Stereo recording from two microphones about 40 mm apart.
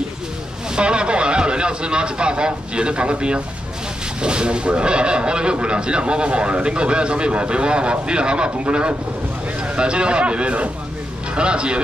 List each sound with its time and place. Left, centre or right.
0.7 s speech: right